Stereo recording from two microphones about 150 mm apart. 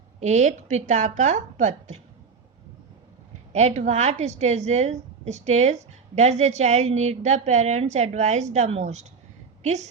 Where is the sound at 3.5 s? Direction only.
50° right (ahead or behind).